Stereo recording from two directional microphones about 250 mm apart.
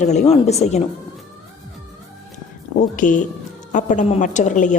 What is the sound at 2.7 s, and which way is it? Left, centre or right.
A woman's voice, left.